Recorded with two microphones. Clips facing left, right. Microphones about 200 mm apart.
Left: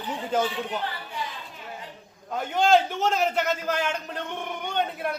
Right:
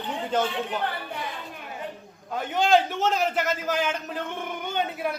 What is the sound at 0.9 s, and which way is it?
Speech, 60° right (ahead or behind).